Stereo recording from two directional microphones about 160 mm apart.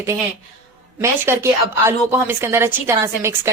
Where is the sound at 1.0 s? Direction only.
15° right (ahead or behind).